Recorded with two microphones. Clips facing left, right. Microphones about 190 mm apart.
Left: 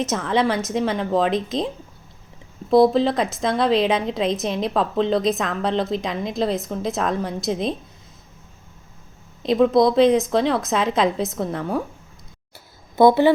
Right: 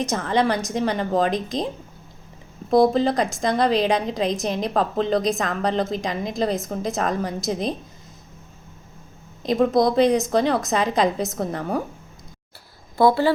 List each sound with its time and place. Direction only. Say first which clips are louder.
0.0 s a woman's voice: left 1 dB; centre (ahead or behind)
9.4 s a woman's voice: left 2 dB; centre (ahead or behind)
13.0 s a woman's voice: left 4 dB; 20° left (ahead or behind)